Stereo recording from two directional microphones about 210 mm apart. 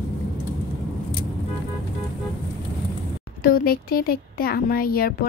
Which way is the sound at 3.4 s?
45° left (ahead or behind).